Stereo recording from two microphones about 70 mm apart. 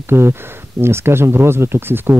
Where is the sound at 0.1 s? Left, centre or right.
Right.